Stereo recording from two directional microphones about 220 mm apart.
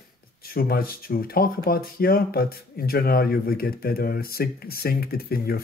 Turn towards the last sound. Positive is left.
turn(degrees=45)  # may be behind; listen again after turning